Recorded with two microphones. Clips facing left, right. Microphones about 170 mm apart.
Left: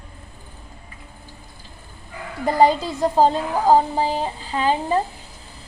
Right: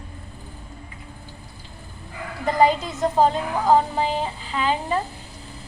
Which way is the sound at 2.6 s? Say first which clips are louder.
Left 2 dB; 35° left (ahead or behind).